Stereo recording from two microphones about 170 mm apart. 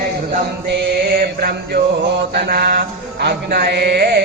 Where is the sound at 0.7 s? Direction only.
65° right (ahead or behind).